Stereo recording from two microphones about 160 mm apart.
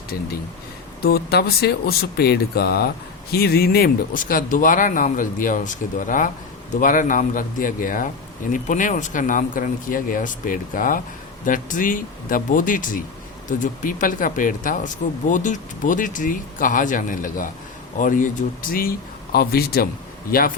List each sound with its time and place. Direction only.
1.0 s speech: 80° left; by 18.3 s 55° left (ahead or behind)
18.7 s speech: 65° left (ahead or behind)